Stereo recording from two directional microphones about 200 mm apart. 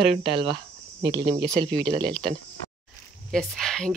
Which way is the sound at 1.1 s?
20° right (ahead or behind).